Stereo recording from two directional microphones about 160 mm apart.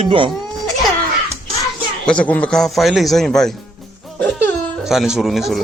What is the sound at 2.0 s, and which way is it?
A man's voice, 5° left (ahead or behind).